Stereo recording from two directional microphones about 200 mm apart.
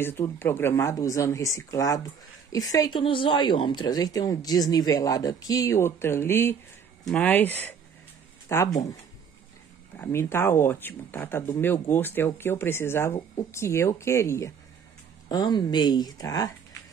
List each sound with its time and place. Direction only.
0.0 s speech: 10° left (ahead or behind)
9.9 s speech: 10° left (ahead or behind)